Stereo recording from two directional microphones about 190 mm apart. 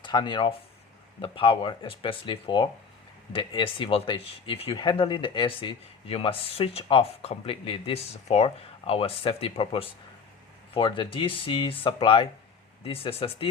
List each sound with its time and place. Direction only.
0.0 s speech: 25° left (ahead or behind)